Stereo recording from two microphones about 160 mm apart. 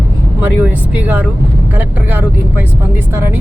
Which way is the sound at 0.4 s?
10° right (ahead or behind).